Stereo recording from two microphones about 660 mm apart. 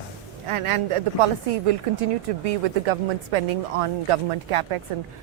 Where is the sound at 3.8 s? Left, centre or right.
Right.